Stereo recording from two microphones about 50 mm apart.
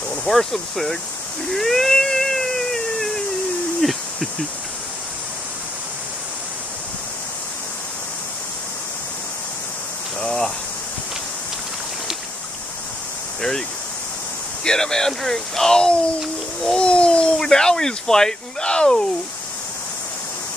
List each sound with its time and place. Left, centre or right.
0.2 s speech: centre
1.5 s a sound: centre
3.8 s speech: centre
10.2 s speech: centre
13.4 s speech: centre
16.7 s a sound: left
17.4 s speech: centre